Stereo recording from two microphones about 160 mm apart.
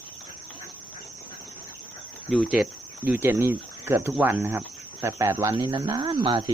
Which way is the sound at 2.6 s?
Centre (ahead or behind).